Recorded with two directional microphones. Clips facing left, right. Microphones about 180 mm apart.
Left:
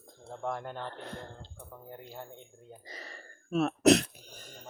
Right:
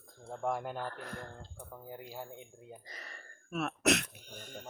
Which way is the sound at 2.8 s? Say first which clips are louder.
Left 4 dB; 30° left (ahead or behind).